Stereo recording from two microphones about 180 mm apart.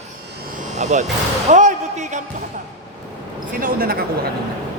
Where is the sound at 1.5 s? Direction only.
40° right (ahead or behind).